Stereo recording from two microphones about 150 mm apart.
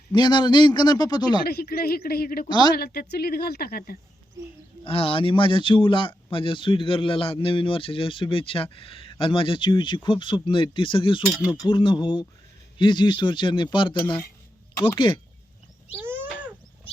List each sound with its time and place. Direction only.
0.1 s a man's voice: 30° left (ahead or behind)
1.5 s a woman's voice: 90° left
2.5 s a man's voice: 30° left (ahead or behind)
2.7 s a woman's voice: 90° left
4.8 s speech: 40° left (ahead or behind)
11.3 s speech: 5° right (ahead or behind)
11.6 s speech: 35° left (ahead or behind)
14.9 s speech: 30° left (ahead or behind)
16.0 s a sound: 15° right (ahead or behind)